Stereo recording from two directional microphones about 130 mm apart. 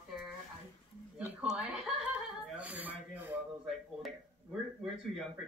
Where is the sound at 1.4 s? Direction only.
5° right (ahead or behind).